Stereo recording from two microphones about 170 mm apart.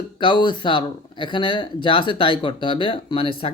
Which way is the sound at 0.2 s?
30° left (ahead or behind).